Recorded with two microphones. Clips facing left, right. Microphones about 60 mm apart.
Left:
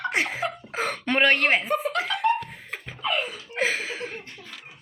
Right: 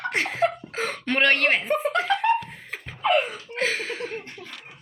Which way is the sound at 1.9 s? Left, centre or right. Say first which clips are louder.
Right 3 dB; right.